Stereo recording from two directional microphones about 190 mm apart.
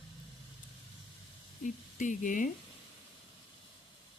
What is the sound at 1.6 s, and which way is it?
Speech, 40° left (ahead or behind).